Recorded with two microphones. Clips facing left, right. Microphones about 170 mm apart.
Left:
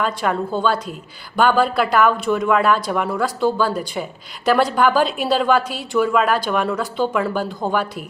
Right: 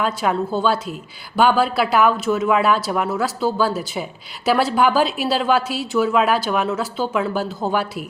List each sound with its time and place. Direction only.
0.0 s speech: 5° right (ahead or behind)